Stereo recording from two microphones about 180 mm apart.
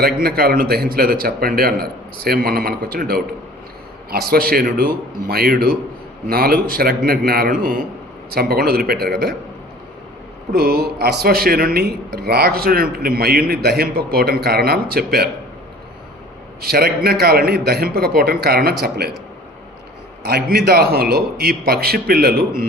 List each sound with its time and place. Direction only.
0.0 s speech: 60° right (ahead or behind)
10.5 s speech: 60° right (ahead or behind)
16.6 s speech: 60° right (ahead or behind)
20.2 s speech: 60° right (ahead or behind)